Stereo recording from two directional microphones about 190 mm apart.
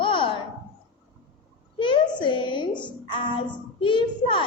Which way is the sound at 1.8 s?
25° left (ahead or behind).